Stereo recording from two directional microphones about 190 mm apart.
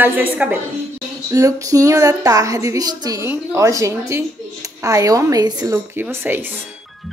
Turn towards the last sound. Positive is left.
turn(degrees=-10)  # may be behind; listen again after turning